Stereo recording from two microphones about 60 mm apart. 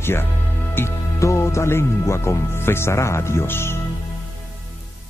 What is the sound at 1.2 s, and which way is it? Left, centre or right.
Speech, left.